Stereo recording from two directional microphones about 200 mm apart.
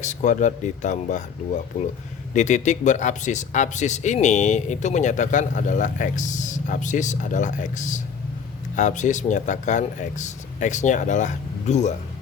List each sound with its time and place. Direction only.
0.0 s speech: 35° left (ahead or behind)